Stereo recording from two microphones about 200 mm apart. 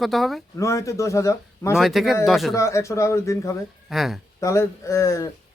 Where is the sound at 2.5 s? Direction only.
15° left (ahead or behind).